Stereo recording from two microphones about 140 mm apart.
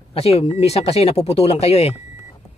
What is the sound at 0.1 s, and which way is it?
Speech, 45° left (ahead or behind).